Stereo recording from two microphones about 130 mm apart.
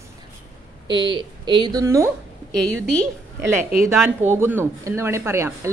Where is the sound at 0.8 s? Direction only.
40° right (ahead or behind).